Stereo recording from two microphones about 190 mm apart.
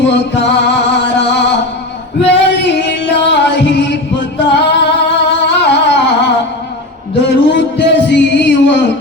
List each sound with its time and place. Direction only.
0.0 s music: 65° left (ahead or behind)
2.7 s music: 65° left (ahead or behind)